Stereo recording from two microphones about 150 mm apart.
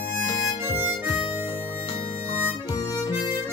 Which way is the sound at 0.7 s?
15° right (ahead or behind).